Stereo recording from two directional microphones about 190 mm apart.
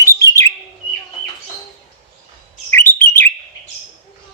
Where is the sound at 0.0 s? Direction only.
15° left (ahead or behind).